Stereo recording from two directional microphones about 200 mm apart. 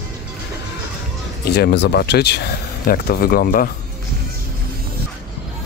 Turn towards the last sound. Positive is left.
turn(degrees=45)  # may be behind; listen again after turning